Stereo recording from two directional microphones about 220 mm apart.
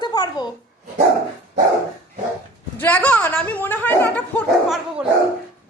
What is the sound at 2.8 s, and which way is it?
A woman's voice, 10° left (ahead or behind).